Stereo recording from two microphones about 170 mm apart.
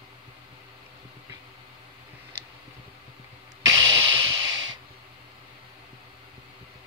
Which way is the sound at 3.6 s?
25° right (ahead or behind).